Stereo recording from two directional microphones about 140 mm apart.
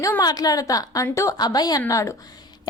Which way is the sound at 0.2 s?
25° left (ahead or behind).